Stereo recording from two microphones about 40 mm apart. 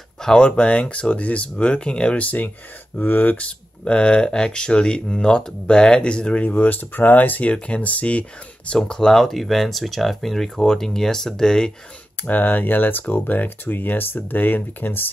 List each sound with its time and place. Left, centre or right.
0.2 s speech: centre
0.5 s speech: left
2.1 s speech: left
3.0 s speech: left
3.3 s speech: left
6.4 s speech: left
7.5 s speech: left
8.7 s speech: centre
9.1 s speech: centre
12.2 s speech: left